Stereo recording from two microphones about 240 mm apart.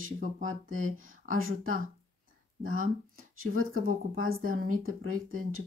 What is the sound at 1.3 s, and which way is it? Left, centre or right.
Speech, right.